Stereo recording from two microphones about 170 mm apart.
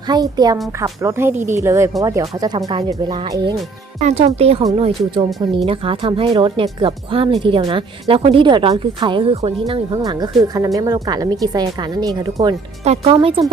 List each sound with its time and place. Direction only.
0.1 s speech: 25° right (ahead or behind)
4.0 s speech: 40° right (ahead or behind)
10.0 s speech: 25° right (ahead or behind)
12.8 s speech: 35° right (ahead or behind)